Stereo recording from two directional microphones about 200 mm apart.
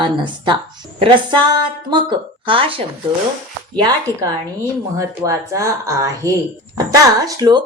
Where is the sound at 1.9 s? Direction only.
25° right (ahead or behind).